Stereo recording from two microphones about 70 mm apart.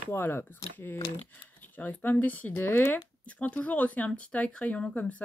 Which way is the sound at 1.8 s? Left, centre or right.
Left.